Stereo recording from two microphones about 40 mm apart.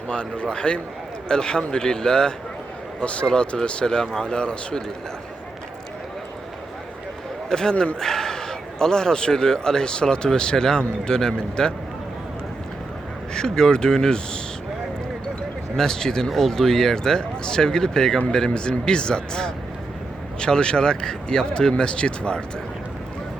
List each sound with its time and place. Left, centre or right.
0.1 s speech: left
3.0 s speech: left
3.8 s a man's voice: centre
7.5 s a man's voice: centre
13.3 s a man's voice: centre
15.7 s a man's voice: centre